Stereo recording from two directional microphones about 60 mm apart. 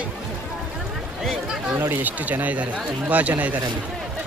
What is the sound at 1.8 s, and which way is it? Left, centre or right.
Speech, right.